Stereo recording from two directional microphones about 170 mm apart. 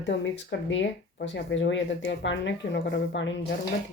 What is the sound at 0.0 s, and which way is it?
Speech, 90° left.